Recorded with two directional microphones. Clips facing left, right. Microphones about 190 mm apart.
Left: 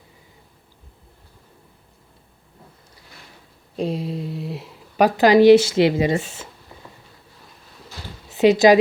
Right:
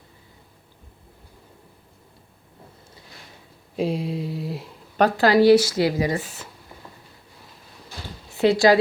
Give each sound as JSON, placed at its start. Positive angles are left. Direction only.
{"t": 3.8, "sound": "a sound", "side_deg": 0}
{"t": 4.9, "sound": "speech", "side_deg": 15}
{"t": 8.3, "sound": "speech", "side_deg": 20}